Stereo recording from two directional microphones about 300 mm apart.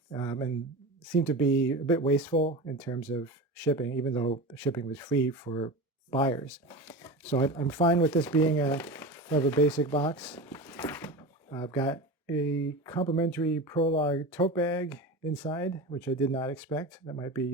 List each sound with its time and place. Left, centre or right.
0.1 s speech: centre
2.7 s speech: centre
10.2 s speech: centre
12.5 s speech: left
12.8 s speech: centre